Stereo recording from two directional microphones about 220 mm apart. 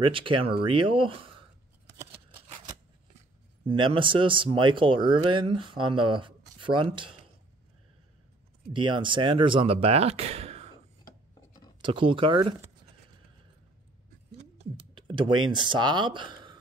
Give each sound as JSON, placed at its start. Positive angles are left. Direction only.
{"t": 0.0, "sound": "speech", "side_deg": -25}
{"t": 3.2, "sound": "speech", "side_deg": -25}
{"t": 8.7, "sound": "speech", "side_deg": -20}
{"t": 11.8, "sound": "speech", "side_deg": -25}
{"t": 14.3, "sound": "typing", "side_deg": -25}
{"t": 15.5, "sound": "speech", "side_deg": -20}